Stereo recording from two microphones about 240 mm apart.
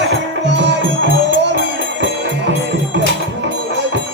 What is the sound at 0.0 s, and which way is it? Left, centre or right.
Music, right.